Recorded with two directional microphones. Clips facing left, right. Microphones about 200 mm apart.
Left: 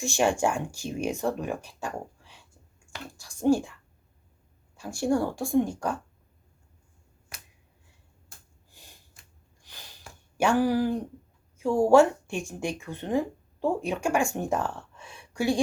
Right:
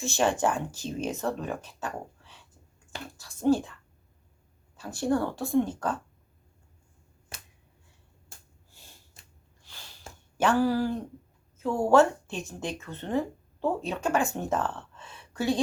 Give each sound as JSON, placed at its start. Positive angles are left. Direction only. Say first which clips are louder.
{"t": 0.0, "sound": "speech", "louder": "left 1 dB", "side_deg": 15}
{"t": 4.8, "sound": "speech", "louder": "left 1 dB", "side_deg": 15}
{"t": 7.3, "sound": "finger snapping", "louder": "right 2 dB", "side_deg": -30}
{"t": 8.7, "sound": "snort", "louder": "left 1 dB", "side_deg": 15}
{"t": 10.3, "sound": "speech", "louder": "left 1 dB", "side_deg": 15}